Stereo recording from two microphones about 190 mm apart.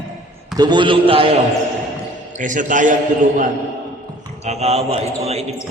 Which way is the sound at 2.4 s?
45° right (ahead or behind).